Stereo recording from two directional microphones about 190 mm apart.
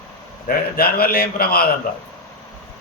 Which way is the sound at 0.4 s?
55° left (ahead or behind).